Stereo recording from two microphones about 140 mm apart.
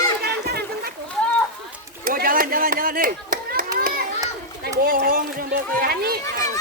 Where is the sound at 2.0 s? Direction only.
90° right.